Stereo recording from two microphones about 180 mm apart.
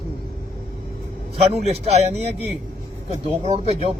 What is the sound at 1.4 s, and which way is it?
Speech, 35° right (ahead or behind).